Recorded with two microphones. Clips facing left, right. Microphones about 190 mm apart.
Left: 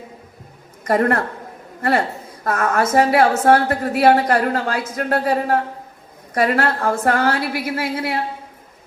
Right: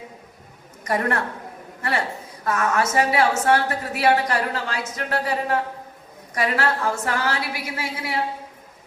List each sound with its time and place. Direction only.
0.9 s a woman's voice: 50° left (ahead or behind)